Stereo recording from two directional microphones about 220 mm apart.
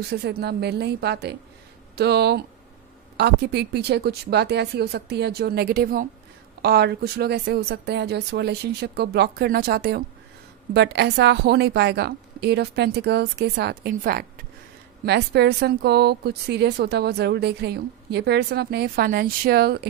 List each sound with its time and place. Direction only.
0.1 s speech: 45° right (ahead or behind)